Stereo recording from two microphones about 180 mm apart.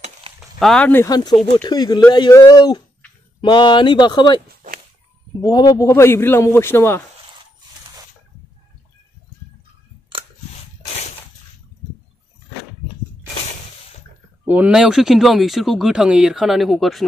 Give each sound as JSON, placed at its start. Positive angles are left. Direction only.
{"t": 0.6, "sound": "a man's voice", "side_deg": 5}
{"t": 1.0, "sound": "speech", "side_deg": 20}
{"t": 5.4, "sound": "a man's voice", "side_deg": 20}
{"t": 10.1, "sound": "a sound", "side_deg": -30}
{"t": 14.4, "sound": "speech", "side_deg": -10}